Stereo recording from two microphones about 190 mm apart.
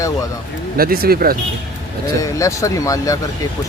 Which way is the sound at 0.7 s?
50° right (ahead or behind).